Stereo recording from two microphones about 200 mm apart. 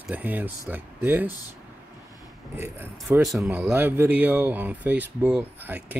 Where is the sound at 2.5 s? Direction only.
10° right (ahead or behind).